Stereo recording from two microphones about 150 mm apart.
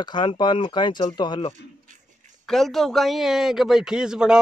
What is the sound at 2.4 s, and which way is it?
Speech, centre (ahead or behind).